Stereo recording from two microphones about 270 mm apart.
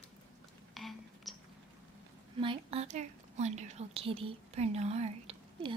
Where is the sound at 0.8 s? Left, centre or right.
Centre.